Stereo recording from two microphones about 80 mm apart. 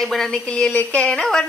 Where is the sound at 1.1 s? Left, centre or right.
Centre.